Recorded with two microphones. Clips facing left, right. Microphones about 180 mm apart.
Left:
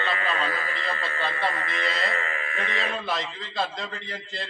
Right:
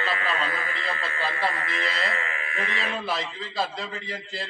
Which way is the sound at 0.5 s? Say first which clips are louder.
Left 1 dB; centre (ahead or behind).